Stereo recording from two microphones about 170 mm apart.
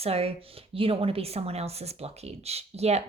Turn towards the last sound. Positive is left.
turn(degrees=-40)  # may be behind; listen again after turning